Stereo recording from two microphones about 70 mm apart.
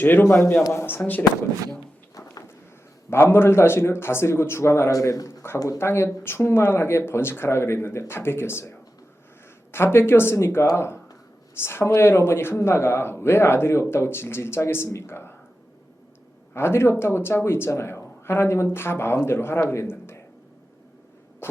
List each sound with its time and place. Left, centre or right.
0.0 s speech: left
3.1 s speech: left
9.7 s speech: left
16.6 s speech: left
21.4 s a sound: left